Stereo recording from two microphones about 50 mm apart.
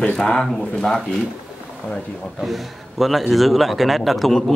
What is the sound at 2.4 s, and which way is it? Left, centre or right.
A man's voice, centre.